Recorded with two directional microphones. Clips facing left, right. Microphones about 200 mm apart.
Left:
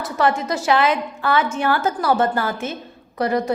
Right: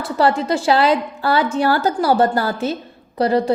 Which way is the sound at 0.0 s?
35° right (ahead or behind).